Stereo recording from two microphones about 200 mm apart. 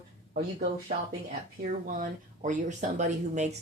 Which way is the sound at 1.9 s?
40° right (ahead or behind).